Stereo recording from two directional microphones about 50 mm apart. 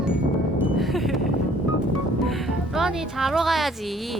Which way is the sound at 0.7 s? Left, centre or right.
Centre.